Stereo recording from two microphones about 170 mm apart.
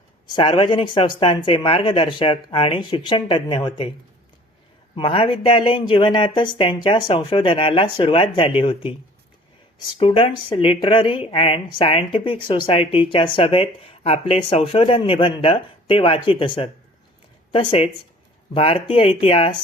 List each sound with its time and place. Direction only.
0.3 s speech: 25° left (ahead or behind)
4.9 s speech: 30° left (ahead or behind)
10.0 s speech: 35° left (ahead or behind)